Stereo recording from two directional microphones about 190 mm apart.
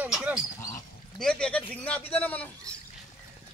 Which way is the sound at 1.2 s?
5° left (ahead or behind).